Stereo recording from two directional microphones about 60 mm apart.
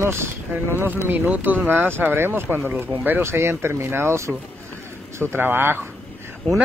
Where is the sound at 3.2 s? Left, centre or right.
Right.